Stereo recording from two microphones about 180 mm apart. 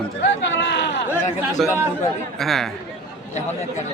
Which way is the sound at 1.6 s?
Centre (ahead or behind).